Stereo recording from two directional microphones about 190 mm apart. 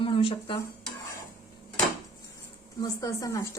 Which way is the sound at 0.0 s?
30° left (ahead or behind).